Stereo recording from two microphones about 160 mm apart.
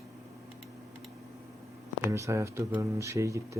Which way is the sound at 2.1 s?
20° right (ahead or behind).